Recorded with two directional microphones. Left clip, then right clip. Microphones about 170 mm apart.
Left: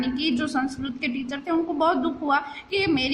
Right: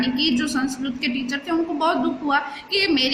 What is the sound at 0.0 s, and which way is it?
A woman's voice, 50° left (ahead or behind).